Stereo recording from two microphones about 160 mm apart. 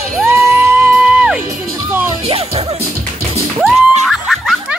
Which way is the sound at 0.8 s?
5° right (ahead or behind).